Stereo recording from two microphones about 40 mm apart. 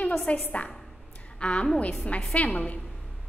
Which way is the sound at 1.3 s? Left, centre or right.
Left.